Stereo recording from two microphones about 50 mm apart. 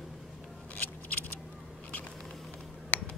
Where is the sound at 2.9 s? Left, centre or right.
Left.